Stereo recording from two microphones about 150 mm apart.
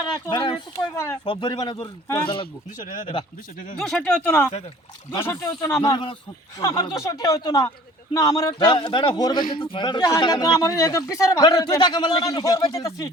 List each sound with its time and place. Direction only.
0.3 s speech: 35° left (ahead or behind)
3.8 s speech: 5° left (ahead or behind)
5.8 s speech: 30° left (ahead or behind)